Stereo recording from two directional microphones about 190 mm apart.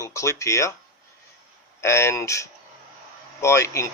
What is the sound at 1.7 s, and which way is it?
Speech, 15° left (ahead or behind).